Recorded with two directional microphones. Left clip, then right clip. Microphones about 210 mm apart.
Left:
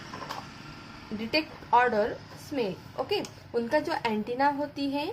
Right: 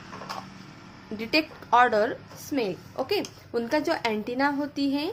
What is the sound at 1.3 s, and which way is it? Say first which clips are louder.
A woman's voice: right 2 dB; 30° right (ahead or behind).